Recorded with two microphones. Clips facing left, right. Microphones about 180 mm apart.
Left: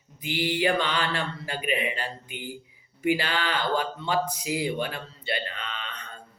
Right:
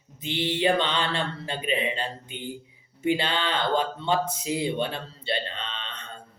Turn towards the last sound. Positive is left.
turn(degrees=-25)  # may be behind; listen again after turning